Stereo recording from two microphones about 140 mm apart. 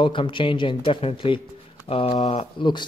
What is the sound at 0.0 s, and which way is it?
Speech, 35° left (ahead or behind).